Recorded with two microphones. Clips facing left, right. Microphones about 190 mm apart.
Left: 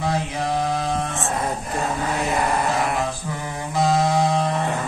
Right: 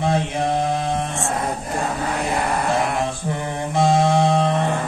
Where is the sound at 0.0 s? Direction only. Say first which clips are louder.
Right 3 dB; 25° right (ahead or behind).